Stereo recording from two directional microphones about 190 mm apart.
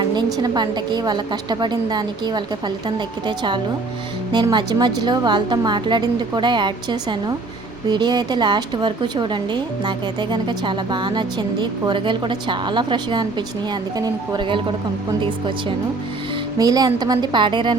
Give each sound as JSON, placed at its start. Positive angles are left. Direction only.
{"t": 0.1, "sound": "a woman's voice", "side_deg": -20}
{"t": 16.6, "sound": "a woman's voice", "side_deg": -20}